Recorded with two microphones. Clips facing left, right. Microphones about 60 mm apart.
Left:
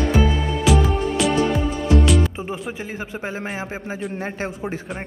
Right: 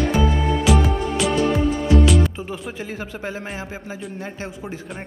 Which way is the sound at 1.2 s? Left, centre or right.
Centre.